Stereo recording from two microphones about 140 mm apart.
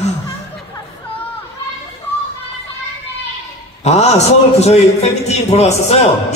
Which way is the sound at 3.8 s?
50° left (ahead or behind).